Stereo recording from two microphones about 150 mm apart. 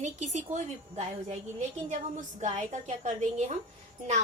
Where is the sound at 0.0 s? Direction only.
50° right (ahead or behind).